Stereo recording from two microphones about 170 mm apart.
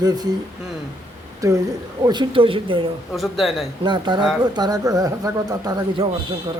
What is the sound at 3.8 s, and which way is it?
Speech, 25° right (ahead or behind).